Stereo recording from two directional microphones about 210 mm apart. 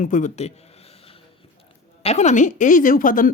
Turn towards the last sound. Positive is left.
turn(degrees=40)  # may be behind; listen again after turning